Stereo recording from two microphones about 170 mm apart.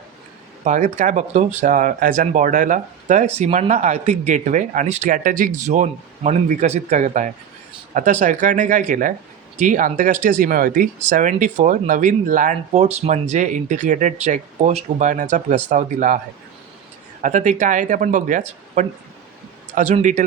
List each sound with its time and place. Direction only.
0.6 s speech: 45° right (ahead or behind)
17.2 s speech: 45° right (ahead or behind)